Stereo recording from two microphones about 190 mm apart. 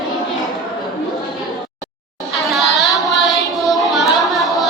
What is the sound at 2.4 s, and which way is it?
Child singing, centre (ahead or behind).